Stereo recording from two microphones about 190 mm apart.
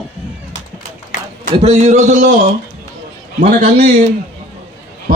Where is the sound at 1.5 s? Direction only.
35° right (ahead or behind).